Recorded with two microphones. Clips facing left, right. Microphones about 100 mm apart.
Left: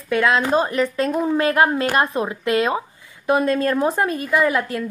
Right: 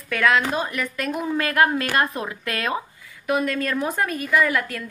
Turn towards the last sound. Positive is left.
turn(degrees=25)  # may be behind; listen again after turning